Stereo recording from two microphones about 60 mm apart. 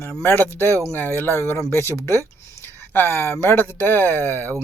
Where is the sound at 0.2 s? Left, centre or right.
Left.